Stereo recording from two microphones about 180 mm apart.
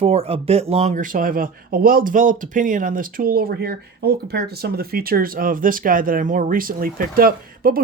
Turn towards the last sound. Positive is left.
turn(degrees=-55)  # may be behind; listen again after turning